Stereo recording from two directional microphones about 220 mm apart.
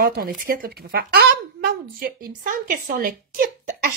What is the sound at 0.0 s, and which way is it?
A woman's voice, 40° right (ahead or behind).